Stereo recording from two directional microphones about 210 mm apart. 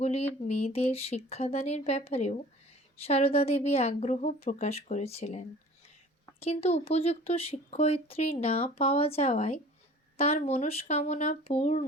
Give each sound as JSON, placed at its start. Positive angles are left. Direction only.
{"t": 0.0, "sound": "a woman's voice", "side_deg": 30}